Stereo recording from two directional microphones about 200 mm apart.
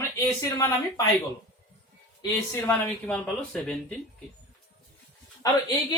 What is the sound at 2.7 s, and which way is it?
Speech, 5° left (ahead or behind).